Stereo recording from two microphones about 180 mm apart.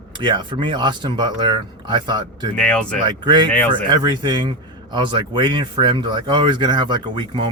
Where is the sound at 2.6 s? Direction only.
5° left (ahead or behind).